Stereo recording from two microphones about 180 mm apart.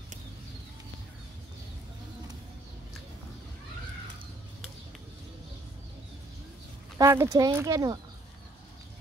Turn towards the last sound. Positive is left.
turn(degrees=-20)  # may be behind; listen again after turning